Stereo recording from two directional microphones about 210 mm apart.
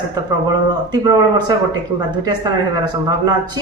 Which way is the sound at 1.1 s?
20° right (ahead or behind).